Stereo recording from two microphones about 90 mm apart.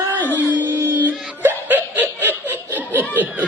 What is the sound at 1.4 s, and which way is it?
Laughter, 20° right (ahead or behind).